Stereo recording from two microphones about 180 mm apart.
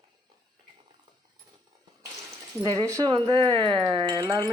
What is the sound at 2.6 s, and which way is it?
Speech, 25° right (ahead or behind).